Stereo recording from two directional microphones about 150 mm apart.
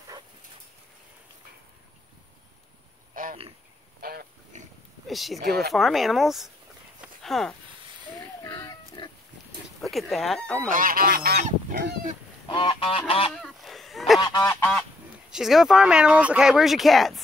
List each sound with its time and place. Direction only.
3.1 s a sound: 70° right (ahead or behind)
4.0 s pig: 90° right
4.5 s pig: 55° right (ahead or behind)
5.0 s speech: centre (ahead or behind)
5.4 s speech: 90° right
5.7 s speech: centre (ahead or behind)
8.5 s pig: 25° left (ahead or behind)
9.8 s speech: centre (ahead or behind)
10.7 s goose: 65° right (ahead or behind); by 12.1 s 90° right
12.4 s goose: 30° left (ahead or behind)
13.3 s a sound: centre (ahead or behind)
14.2 s goose: 25° left (ahead or behind)
15.3 s speech: 5° right (ahead or behind)